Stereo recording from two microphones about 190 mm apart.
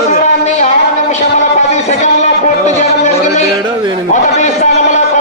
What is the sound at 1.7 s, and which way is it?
A man's voice, 35° left (ahead or behind).